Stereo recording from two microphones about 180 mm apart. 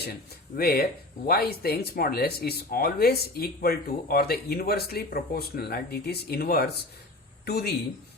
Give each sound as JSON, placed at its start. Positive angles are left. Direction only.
{"t": 0.0, "sound": "speech", "side_deg": 60}